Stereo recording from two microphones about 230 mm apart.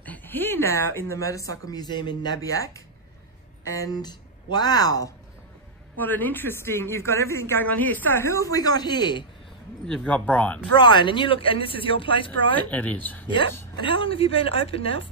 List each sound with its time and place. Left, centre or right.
0.0 s a woman's voice: centre
9.8 s speech: centre
10.7 s a woman's voice: centre
12.7 s a woman's voice: centre
13.3 s a woman's voice: left